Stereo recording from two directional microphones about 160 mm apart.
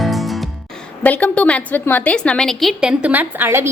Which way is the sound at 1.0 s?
10° left (ahead or behind).